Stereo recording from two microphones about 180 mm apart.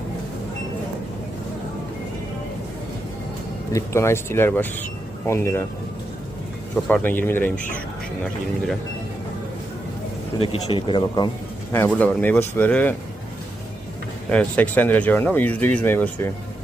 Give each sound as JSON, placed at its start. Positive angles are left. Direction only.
{"t": 3.7, "sound": "speech", "side_deg": 15}
{"t": 6.8, "sound": "speech", "side_deg": 10}
{"t": 10.3, "sound": "speech", "side_deg": 30}
{"t": 11.7, "sound": "speech", "side_deg": 10}
{"t": 14.3, "sound": "speech", "side_deg": 5}